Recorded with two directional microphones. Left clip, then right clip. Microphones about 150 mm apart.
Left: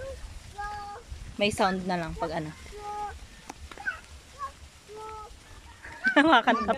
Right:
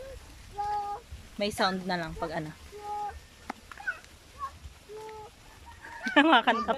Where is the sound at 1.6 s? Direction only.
5° left (ahead or behind).